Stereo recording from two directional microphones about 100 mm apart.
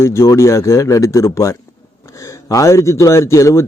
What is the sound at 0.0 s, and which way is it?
A man's voice, 30° left (ahead or behind).